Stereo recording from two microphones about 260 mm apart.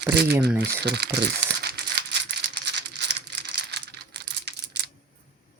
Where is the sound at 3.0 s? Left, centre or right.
Right.